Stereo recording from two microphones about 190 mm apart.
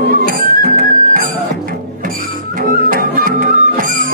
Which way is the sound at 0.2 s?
50° right (ahead or behind).